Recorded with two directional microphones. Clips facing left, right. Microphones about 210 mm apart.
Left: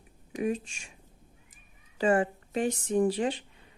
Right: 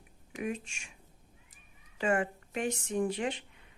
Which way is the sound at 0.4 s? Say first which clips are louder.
Left 6 dB; 35° left (ahead or behind).